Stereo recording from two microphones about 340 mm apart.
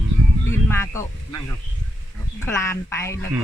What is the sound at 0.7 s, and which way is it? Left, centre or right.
Speech, centre.